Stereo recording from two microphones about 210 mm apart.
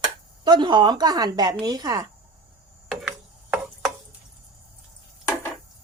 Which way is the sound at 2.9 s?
5° right (ahead or behind).